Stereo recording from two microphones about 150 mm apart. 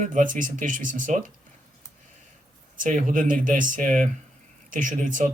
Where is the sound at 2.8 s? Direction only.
60° right (ahead or behind).